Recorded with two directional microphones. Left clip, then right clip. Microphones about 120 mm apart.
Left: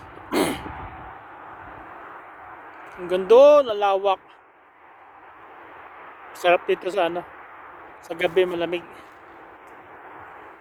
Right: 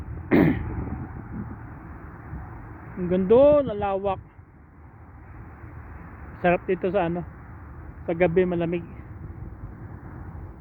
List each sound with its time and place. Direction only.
0.3 s throat clearing: 20° left (ahead or behind)
3.1 s speech: 10° left (ahead or behind)
6.3 s speech: 15° left (ahead or behind)